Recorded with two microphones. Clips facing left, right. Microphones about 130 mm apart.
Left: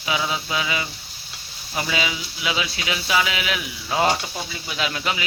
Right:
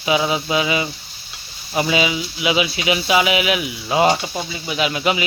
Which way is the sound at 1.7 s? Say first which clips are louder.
Right 7 dB; 20° right (ahead or behind).